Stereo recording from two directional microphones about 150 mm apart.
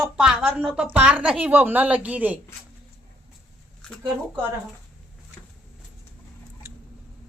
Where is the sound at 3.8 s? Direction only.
5° left (ahead or behind).